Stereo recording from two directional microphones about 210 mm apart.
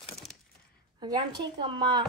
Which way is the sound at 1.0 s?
20° right (ahead or behind).